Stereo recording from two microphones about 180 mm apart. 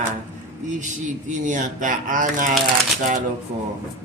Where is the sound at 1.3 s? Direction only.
45° right (ahead or behind).